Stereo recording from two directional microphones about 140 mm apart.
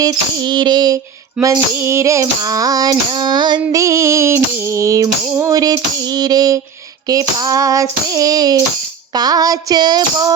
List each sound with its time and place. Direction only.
0.0 s music: 30° right (ahead or behind)
1.4 s female singing: 5° right (ahead or behind)
1.8 s female singing: 20° right (ahead or behind)